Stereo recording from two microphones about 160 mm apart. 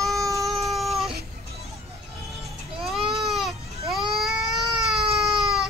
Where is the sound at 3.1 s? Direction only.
Centre (ahead or behind).